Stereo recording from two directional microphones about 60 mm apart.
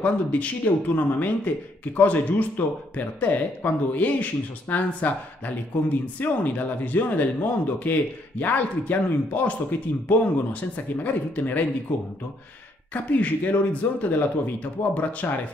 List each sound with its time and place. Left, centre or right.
0.0 s speech: left
6.1 s speech: left
12.9 s speech: left